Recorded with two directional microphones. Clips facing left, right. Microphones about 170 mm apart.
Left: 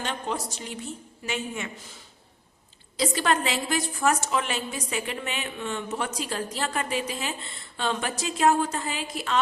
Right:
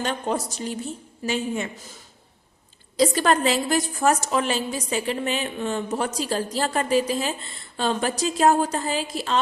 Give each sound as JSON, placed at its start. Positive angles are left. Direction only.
{"t": 0.0, "sound": "a woman's voice", "side_deg": -40}
{"t": 3.0, "sound": "a woman's voice", "side_deg": -40}